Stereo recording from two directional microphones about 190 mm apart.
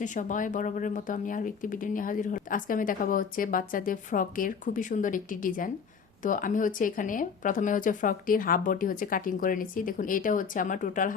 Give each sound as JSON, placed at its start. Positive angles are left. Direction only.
{"t": 0.0, "sound": "speech", "side_deg": 40}